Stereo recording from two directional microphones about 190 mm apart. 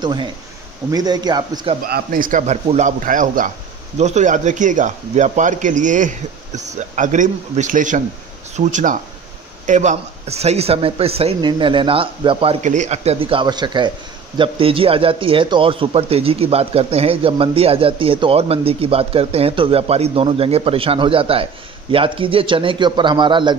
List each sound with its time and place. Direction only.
0.0 s speech: 25° right (ahead or behind)
1.8 s a man's voice: 55° right (ahead or behind); by 23.5 s 25° right (ahead or behind)